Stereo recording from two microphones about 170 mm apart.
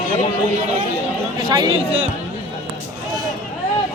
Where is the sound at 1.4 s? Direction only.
25° right (ahead or behind).